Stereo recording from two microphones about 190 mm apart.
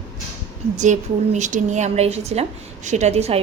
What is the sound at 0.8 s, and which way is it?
A woman's voice, 40° right (ahead or behind).